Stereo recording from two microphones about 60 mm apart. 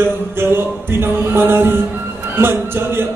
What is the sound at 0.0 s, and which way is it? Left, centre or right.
Music, right.